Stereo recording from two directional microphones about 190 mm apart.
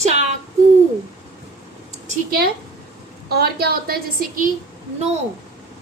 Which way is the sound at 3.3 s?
55° right (ahead or behind).